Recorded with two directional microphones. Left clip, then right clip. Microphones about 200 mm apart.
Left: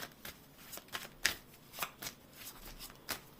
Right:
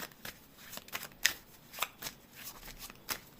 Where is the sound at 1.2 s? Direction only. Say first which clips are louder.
Right 3 dB; 20° right (ahead or behind).